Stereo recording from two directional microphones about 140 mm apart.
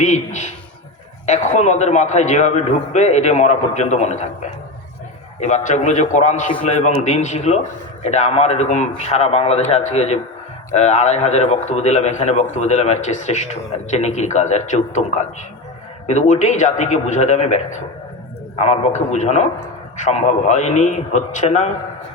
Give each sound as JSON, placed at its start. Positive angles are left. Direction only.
{"t": 0.0, "sound": "a man's voice", "side_deg": 60}
{"t": 5.4, "sound": "a man's voice", "side_deg": 55}